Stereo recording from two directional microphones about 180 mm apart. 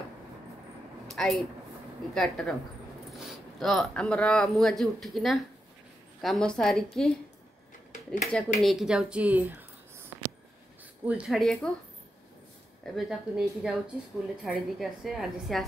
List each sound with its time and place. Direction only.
1.0 s a sound: centre (ahead or behind)
2.1 s speech: centre (ahead or behind)
8.2 s speech: 5° left (ahead or behind)
11.1 s speech: 5° right (ahead or behind)
12.9 s speech: 5° right (ahead or behind)